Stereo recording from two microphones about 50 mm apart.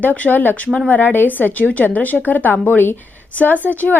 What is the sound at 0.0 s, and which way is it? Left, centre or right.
Speech, left.